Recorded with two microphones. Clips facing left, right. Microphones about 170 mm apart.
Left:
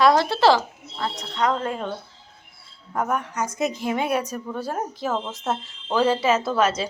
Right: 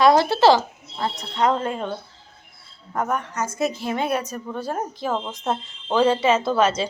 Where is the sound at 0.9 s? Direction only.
25° right (ahead or behind).